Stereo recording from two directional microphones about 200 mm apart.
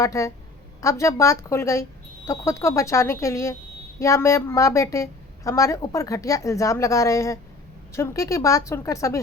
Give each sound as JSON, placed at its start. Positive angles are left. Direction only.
{"t": 0.0, "sound": "a woman's voice", "side_deg": 15}